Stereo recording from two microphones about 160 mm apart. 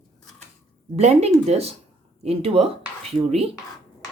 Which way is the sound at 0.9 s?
40° right (ahead or behind).